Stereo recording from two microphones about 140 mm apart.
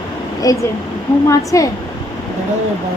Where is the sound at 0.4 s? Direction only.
25° left (ahead or behind).